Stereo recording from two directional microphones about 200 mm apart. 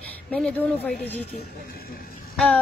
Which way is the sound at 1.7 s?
50° left (ahead or behind).